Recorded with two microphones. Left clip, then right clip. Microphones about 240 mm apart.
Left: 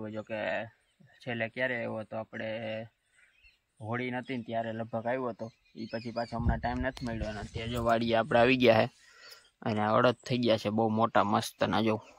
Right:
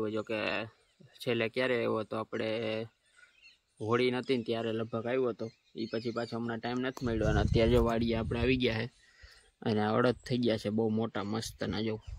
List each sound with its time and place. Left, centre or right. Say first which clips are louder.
0.0 s speech: right 2 dB; centre
7.2 s speech: right 10 dB; right
7.8 s speech: left 4 dB; centre
9.6 s speech: left 3 dB; centre